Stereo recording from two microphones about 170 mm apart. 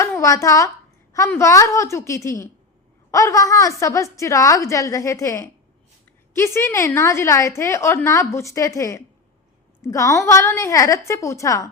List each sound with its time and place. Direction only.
0.0 s a child's voice: 15° left (ahead or behind)